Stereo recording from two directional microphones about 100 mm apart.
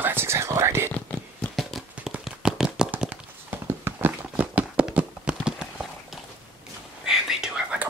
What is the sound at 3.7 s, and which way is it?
Clip-clop, 20° right (ahead or behind).